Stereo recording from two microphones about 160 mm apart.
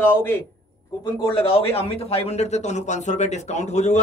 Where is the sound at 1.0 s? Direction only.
35° left (ahead or behind).